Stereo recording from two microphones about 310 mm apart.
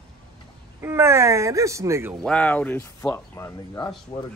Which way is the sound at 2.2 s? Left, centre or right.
Centre.